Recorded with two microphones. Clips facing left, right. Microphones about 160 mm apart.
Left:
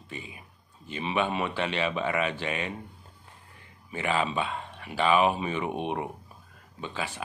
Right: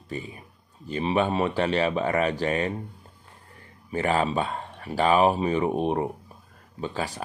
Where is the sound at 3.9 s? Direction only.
40° right (ahead or behind).